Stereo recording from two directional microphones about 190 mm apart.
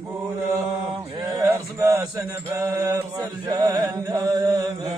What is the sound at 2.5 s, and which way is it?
Chant, 15° right (ahead or behind).